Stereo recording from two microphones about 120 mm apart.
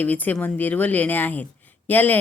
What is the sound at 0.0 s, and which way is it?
A woman's voice, 15° left (ahead or behind).